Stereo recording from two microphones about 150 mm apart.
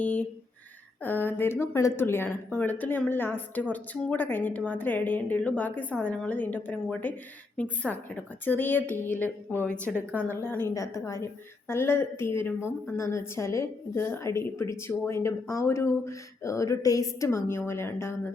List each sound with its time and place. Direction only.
0.0 s a woman's voice: 10° left (ahead or behind)
9.7 s a woman's voice: 15° right (ahead or behind)
10.2 s a woman's voice: 15° left (ahead or behind)